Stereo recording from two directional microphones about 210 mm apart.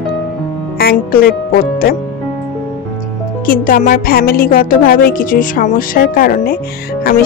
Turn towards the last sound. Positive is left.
turn(degrees=45)  # may be behind; listen again after turning